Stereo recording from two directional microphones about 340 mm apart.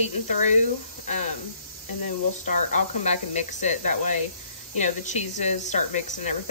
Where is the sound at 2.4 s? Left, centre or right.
Left.